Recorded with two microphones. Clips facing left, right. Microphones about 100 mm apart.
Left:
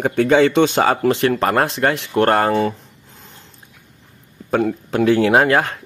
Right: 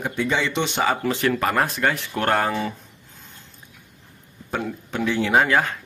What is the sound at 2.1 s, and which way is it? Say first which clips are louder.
Speech: left 10 dB; 45° left (ahead or behind).